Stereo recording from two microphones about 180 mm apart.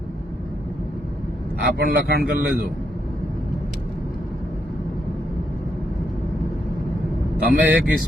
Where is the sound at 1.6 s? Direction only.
60° right (ahead or behind).